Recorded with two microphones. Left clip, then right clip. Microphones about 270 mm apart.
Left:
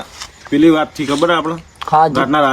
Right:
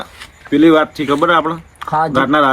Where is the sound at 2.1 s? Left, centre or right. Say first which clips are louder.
Right 1 dB; centre.